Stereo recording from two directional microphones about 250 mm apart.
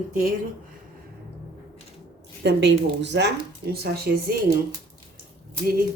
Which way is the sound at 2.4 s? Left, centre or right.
Right.